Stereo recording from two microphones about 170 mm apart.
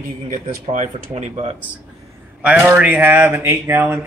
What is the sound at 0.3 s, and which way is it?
Speech, 45° right (ahead or behind).